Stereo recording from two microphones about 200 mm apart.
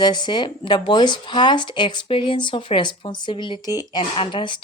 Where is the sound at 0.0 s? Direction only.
20° left (ahead or behind).